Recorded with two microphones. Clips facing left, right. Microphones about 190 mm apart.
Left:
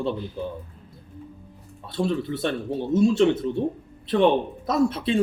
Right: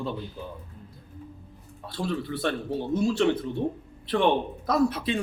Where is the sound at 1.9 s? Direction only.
25° left (ahead or behind).